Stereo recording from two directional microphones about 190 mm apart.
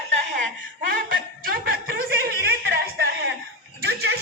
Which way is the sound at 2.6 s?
55° right (ahead or behind).